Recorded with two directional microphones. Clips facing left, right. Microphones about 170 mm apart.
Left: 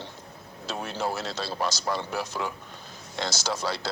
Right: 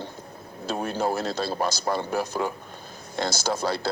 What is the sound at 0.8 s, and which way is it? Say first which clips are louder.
Speech: right 5 dB; 50° right (ahead or behind).